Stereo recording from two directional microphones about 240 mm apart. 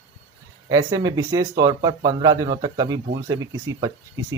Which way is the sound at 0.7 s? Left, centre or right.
Centre.